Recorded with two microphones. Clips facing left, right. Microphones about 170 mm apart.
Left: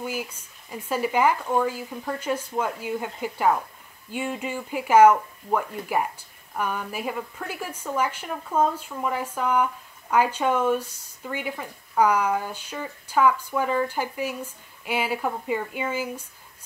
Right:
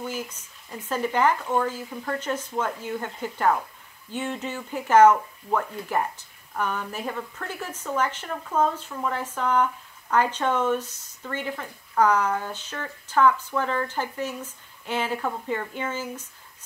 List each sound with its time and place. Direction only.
0.0 s speech: 10° left (ahead or behind)